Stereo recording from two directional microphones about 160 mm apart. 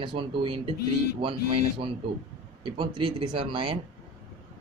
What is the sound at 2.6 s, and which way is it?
A man's voice, 30° right (ahead or behind).